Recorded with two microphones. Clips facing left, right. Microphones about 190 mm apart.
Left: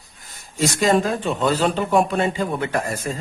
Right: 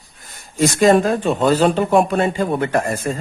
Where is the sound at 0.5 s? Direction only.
50° right (ahead or behind).